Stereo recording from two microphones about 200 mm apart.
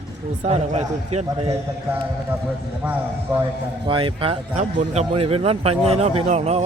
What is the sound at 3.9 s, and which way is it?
A man's voice, 25° right (ahead or behind).